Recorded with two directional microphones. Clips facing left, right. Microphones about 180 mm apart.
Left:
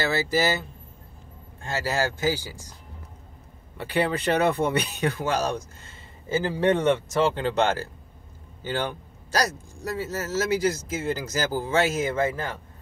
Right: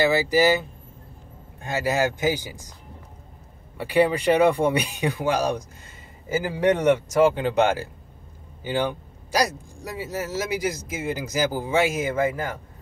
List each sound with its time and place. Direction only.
0.0 s speech: 15° right (ahead or behind)
3.7 s speech: 10° right (ahead or behind)